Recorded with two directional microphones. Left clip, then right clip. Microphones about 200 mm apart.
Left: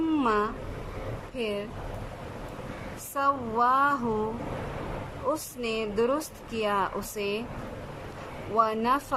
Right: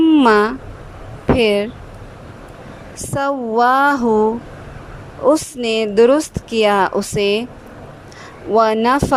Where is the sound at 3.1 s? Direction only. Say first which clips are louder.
Right 9 dB; 40° right (ahead or behind).